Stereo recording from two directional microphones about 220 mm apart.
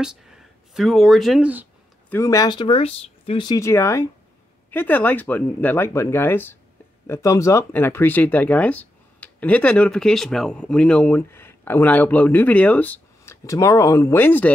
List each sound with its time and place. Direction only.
0.0 s speech: centre (ahead or behind)
2.0 s speech: 15° left (ahead or behind)